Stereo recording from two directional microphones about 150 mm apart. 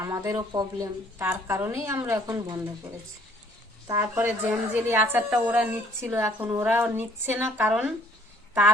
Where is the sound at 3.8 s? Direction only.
15° right (ahead or behind).